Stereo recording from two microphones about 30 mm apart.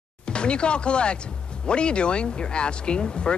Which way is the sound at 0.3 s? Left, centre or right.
Left.